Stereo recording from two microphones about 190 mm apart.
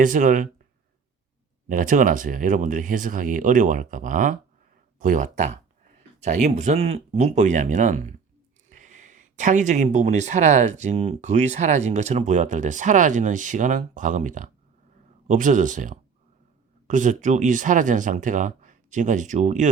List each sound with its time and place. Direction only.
0.0 s speech: 45° right (ahead or behind)
1.6 s speech: 45° right (ahead or behind)